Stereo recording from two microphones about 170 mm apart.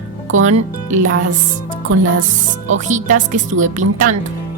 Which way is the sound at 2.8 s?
45° right (ahead or behind).